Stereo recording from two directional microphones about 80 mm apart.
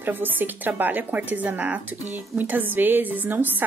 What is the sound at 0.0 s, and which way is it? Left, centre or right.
Speech, right.